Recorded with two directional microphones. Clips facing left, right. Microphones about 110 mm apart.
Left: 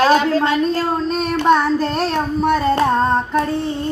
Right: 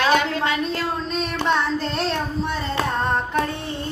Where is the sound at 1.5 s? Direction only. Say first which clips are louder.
Left 8 dB; 45° left (ahead or behind).